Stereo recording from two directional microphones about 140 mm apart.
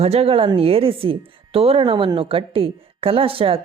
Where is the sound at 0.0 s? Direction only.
45° right (ahead or behind).